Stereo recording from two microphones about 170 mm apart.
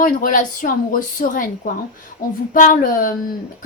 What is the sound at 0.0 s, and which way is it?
Speech, 55° left (ahead or behind).